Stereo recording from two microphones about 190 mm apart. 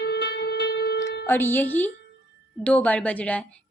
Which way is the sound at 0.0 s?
60° left (ahead or behind).